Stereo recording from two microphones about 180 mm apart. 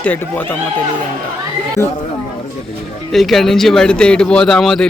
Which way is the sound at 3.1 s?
Centre (ahead or behind).